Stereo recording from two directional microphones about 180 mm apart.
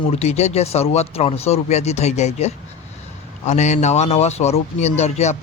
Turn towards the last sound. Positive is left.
turn(degrees=40)  # may be behind; listen again after turning